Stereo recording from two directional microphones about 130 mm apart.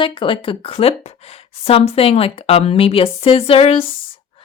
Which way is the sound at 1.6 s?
50° left (ahead or behind).